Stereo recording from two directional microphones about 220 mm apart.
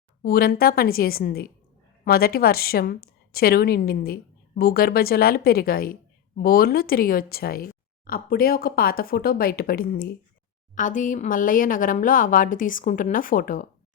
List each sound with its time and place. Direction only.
0.2 s speech: 45° left (ahead or behind)